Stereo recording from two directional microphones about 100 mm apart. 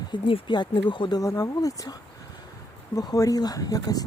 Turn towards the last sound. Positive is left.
turn(degrees=40)  # may be behind; listen again after turning